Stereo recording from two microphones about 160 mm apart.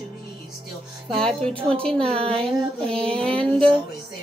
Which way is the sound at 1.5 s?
35° right (ahead or behind).